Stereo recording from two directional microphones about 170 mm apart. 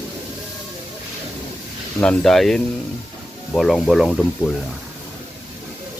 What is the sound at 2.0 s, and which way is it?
Speech, 5° left (ahead or behind).